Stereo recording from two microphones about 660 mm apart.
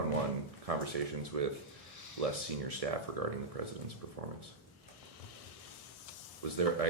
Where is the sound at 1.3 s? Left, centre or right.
Right.